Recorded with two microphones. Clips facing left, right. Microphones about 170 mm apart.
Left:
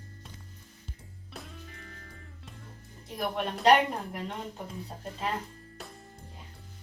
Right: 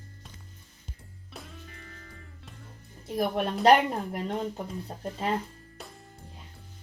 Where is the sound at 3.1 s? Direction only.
40° right (ahead or behind).